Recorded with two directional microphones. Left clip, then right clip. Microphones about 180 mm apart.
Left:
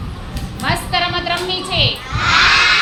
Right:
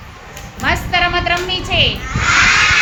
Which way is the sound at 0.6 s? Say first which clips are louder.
Right 3 dB; 35° right (ahead or behind).